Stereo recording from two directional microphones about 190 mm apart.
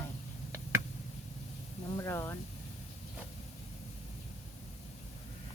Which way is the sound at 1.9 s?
15° left (ahead or behind).